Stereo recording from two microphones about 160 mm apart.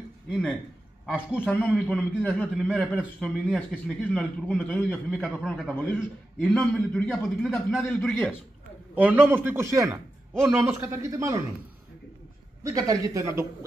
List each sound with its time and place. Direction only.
1.0 s a man's voice: 5° right (ahead or behind)
1.4 s a man's voice: 10° left (ahead or behind)
8.9 s a man's voice: 10° right (ahead or behind)
12.6 s speech: 20° right (ahead or behind)